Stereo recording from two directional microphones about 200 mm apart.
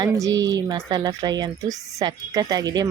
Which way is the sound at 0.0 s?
15° right (ahead or behind).